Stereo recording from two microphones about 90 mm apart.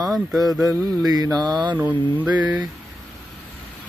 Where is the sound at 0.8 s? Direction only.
45° right (ahead or behind).